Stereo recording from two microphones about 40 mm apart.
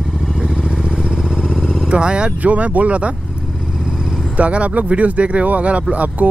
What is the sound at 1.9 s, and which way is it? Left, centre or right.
Speech, right.